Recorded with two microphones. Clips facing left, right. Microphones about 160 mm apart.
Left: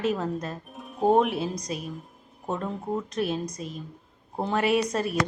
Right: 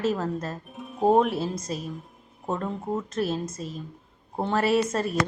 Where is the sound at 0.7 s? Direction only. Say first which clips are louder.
Right 1 dB; centre (ahead or behind).